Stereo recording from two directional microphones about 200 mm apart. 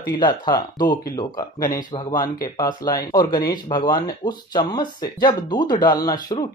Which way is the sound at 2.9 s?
20° left (ahead or behind).